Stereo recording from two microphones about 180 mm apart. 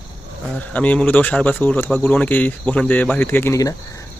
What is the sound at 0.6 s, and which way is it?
Speech, 10° left (ahead or behind).